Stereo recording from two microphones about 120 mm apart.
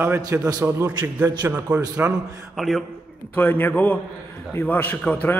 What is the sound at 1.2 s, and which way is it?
Speech, 35° right (ahead or behind).